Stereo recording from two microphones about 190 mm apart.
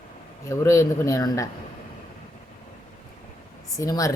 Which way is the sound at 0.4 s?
15° left (ahead or behind).